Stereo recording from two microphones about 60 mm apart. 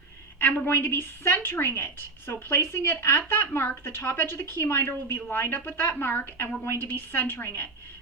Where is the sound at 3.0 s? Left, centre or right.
Left.